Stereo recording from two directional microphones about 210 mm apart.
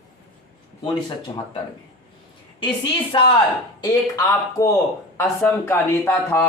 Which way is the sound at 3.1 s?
20° left (ahead or behind).